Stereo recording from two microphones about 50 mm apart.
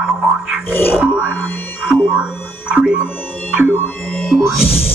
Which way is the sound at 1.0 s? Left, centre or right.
Right.